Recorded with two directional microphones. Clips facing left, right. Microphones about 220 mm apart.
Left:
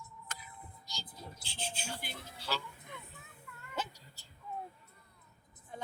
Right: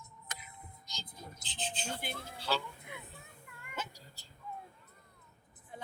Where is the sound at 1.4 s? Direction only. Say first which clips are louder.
Right 3 dB; 10° left (ahead or behind).